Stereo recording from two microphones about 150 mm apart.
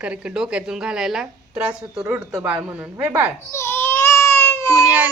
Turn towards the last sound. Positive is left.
turn(degrees=-15)  # may be behind; listen again after turning